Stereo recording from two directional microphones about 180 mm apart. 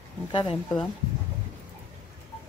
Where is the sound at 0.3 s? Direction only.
25° left (ahead or behind).